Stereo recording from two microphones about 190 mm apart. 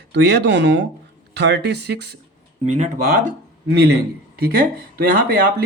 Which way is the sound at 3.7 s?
60° right (ahead or behind).